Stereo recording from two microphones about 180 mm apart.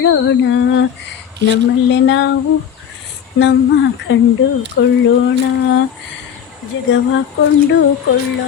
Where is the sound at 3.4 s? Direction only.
80° left.